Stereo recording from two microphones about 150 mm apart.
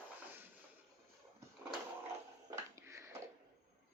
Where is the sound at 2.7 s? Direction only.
15° right (ahead or behind).